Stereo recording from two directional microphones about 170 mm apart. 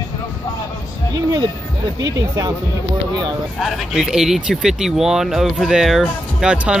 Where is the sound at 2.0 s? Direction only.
20° right (ahead or behind).